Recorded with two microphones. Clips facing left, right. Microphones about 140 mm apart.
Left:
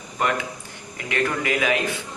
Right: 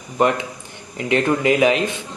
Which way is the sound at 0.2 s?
20° right (ahead or behind).